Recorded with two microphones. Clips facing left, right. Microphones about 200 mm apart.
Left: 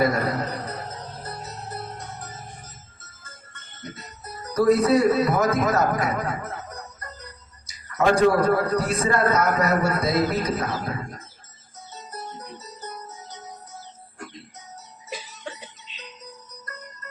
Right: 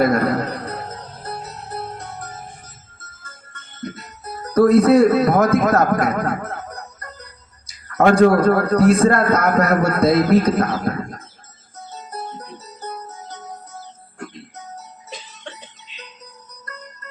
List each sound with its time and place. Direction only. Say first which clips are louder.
0.0 s a man's voice: right 5 dB; 60° right (ahead or behind)
1.2 s music: right 8 dB; 60° right (ahead or behind)
3.5 s speech: right 8 dB; 60° right (ahead or behind)
7.0 s music: right 2 dB; 60° right (ahead or behind)
7.7 s a man's voice: right 5 dB; 60° right (ahead or behind)
11.9 s music: right 5 dB; 60° right (ahead or behind)